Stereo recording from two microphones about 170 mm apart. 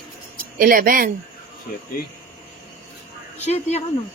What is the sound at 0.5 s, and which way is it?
Speech, 55° right (ahead or behind).